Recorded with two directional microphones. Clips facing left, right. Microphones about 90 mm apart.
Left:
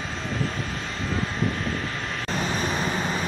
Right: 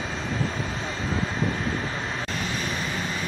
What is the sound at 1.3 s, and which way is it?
Vehicle, 35° right (ahead or behind).